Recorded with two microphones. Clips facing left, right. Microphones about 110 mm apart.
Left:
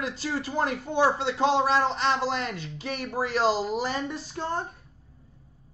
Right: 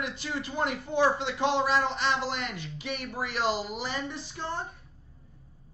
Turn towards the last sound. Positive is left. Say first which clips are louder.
# left 4 dB
turn(degrees=45)  # may be behind; listen again after turning